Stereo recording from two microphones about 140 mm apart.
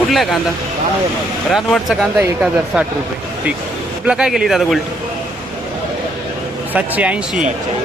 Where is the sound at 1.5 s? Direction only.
Centre (ahead or behind).